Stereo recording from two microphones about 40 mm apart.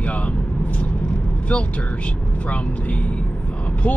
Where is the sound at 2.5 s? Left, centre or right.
Left.